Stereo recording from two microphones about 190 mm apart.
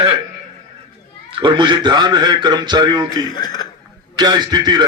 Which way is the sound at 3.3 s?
20° left (ahead or behind).